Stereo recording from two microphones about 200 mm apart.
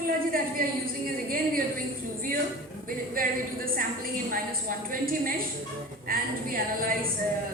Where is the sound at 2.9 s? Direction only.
45° right (ahead or behind).